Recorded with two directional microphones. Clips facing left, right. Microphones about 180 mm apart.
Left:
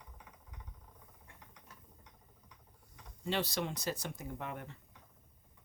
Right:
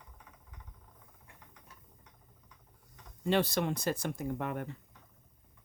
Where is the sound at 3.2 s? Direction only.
55° right (ahead or behind).